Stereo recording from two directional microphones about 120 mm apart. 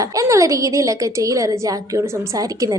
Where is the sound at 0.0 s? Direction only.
25° right (ahead or behind).